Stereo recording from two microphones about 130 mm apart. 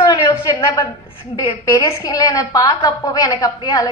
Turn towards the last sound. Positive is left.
turn(degrees=30)  # may be behind; listen again after turning